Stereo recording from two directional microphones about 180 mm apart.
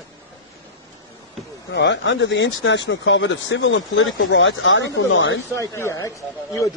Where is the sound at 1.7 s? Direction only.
80° left.